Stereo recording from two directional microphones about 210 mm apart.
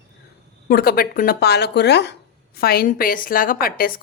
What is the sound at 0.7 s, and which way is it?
Speech, 45° left (ahead or behind).